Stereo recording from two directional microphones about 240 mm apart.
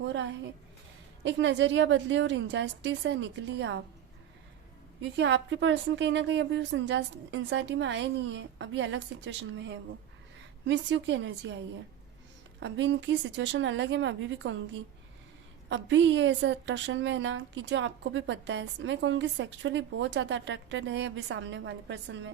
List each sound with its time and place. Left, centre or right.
1.2 s a woman's voice: right
5.1 s a woman's voice: right
12.5 s a woman's voice: right
15.7 s a woman's voice: right